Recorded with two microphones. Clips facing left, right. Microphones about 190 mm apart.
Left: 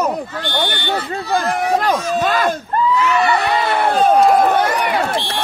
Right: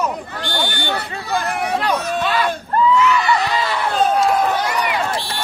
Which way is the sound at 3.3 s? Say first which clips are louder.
Left 3 dB; 60° left (ahead or behind).